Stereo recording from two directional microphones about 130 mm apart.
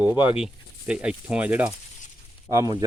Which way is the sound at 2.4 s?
30° right (ahead or behind).